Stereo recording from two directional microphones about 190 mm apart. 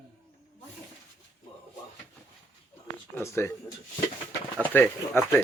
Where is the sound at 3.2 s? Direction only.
15° left (ahead or behind).